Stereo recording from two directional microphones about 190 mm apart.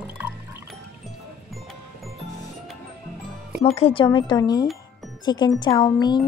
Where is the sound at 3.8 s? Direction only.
30° left (ahead or behind).